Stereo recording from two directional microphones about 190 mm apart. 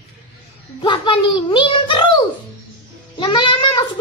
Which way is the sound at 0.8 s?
25° left (ahead or behind).